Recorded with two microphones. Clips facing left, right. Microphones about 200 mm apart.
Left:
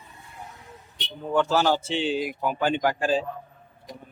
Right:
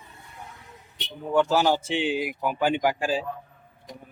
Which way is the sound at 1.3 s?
15° right (ahead or behind).